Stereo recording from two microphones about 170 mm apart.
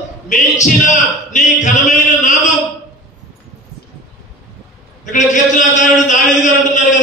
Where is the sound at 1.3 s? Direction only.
45° left (ahead or behind).